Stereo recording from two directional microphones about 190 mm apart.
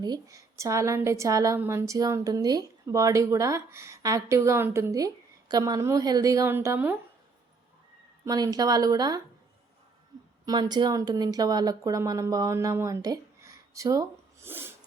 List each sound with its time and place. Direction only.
0.0 s a woman's voice: 20° right (ahead or behind)
8.2 s speech: 20° right (ahead or behind)
10.4 s speech: 20° right (ahead or behind)